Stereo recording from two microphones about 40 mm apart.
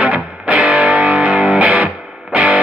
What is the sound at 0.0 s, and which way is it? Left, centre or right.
Music, right.